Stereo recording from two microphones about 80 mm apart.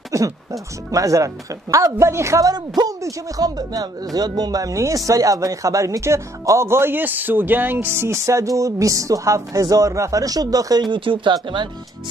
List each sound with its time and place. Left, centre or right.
0.1 s speech: right
2.5 s speech: right
10.9 s speech: right